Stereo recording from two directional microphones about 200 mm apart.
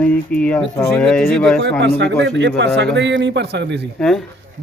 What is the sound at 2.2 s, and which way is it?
A man's voice, 65° right (ahead or behind).